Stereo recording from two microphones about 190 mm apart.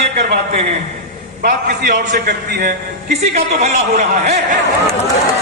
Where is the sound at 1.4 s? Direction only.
45° right (ahead or behind).